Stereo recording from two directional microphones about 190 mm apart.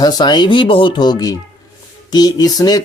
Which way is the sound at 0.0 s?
20° left (ahead or behind).